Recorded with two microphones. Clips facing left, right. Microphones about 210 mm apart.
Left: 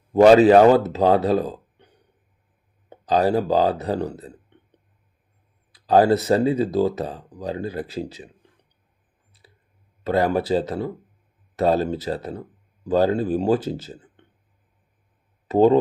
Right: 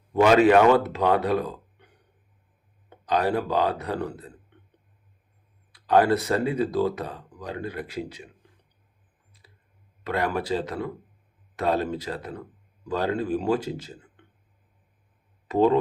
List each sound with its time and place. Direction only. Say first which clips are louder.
0.1 s speech: left 5 dB; 35° left (ahead or behind)
2.9 s speech: left 5 dB; 35° left (ahead or behind)
5.7 s a sound: left 4 dB; 35° left (ahead or behind)
6.2 s speech: left 5 dB; 30° left (ahead or behind)
10.1 s speech: left 6 dB; 30° left (ahead or behind)
15.4 s speech: left 5 dB; 35° left (ahead or behind)